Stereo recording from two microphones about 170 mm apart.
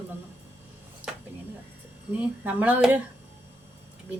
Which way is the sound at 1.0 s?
10° right (ahead or behind).